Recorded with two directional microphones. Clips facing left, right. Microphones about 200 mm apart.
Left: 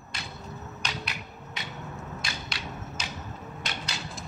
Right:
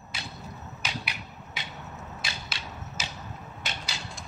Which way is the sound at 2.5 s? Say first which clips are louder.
Left 3 dB; 25° right (ahead or behind).